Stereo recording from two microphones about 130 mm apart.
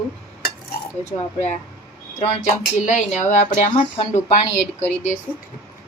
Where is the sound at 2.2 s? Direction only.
60° left (ahead or behind).